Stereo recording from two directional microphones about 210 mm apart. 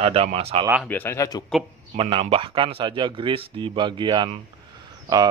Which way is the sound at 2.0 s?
25° right (ahead or behind).